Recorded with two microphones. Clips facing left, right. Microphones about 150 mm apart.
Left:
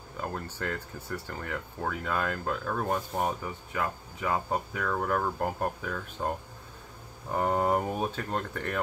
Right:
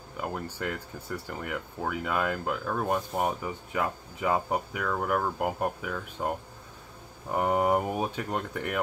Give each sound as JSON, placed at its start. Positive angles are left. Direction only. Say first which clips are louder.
{"t": 0.2, "sound": "speech", "louder": "right 2 dB", "side_deg": -10}